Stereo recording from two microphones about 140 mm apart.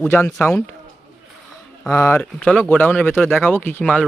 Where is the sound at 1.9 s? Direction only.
15° left (ahead or behind).